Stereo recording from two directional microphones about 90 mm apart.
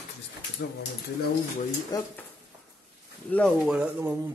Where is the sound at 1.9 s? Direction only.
45° left (ahead or behind).